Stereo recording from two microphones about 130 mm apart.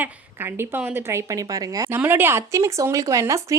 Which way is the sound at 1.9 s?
15° right (ahead or behind).